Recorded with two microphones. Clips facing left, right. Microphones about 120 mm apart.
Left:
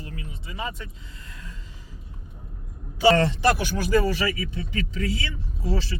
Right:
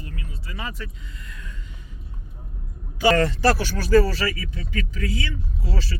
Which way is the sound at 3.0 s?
25° left (ahead or behind).